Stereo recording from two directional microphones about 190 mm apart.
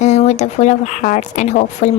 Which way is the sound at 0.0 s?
35° left (ahead or behind).